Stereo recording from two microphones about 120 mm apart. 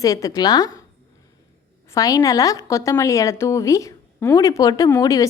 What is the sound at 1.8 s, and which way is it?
A woman's voice, 30° left (ahead or behind).